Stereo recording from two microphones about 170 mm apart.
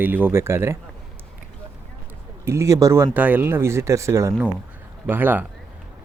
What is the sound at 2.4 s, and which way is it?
Speech, 15° right (ahead or behind).